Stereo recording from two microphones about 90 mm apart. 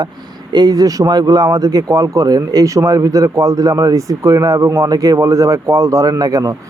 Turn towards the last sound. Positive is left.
turn(degrees=-45)  # may be behind; listen again after turning